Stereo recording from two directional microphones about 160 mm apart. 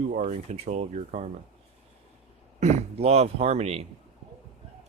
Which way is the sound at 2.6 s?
40° right (ahead or behind).